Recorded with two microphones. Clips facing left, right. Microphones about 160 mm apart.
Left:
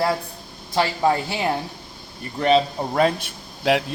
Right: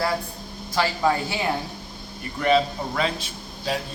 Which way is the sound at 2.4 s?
35° left (ahead or behind).